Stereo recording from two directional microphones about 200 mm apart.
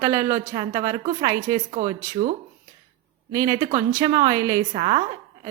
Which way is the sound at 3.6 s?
30° right (ahead or behind).